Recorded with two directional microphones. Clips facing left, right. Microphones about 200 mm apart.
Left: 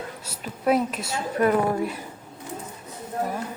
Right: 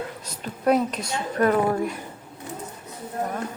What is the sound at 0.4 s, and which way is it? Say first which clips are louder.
Speech: right 1 dB; 5° left (ahead or behind).